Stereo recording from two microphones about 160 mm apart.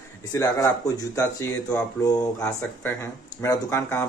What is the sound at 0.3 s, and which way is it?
A man's voice, 20° left (ahead or behind).